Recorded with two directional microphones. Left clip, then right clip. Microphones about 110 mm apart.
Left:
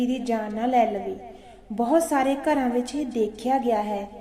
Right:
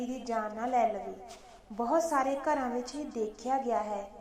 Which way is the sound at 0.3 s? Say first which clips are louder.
Left 4 dB; 15° left (ahead or behind).